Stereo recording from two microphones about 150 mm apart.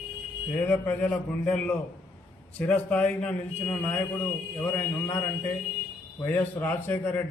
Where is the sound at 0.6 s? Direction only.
10° left (ahead or behind).